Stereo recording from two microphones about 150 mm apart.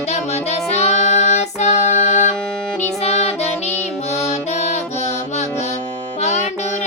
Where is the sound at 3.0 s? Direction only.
45° left (ahead or behind).